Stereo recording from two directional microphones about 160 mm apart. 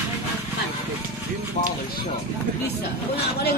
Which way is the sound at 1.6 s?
50° left (ahead or behind).